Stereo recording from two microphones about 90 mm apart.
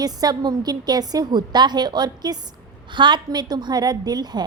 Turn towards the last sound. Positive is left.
turn(degrees=-50)  # may be behind; listen again after turning